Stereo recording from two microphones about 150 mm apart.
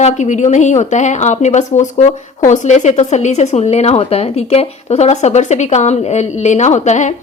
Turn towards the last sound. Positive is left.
turn(degrees=50)  # may be behind; listen again after turning